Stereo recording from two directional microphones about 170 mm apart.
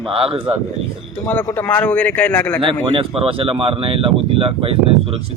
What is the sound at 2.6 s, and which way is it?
Speech, 30° right (ahead or behind).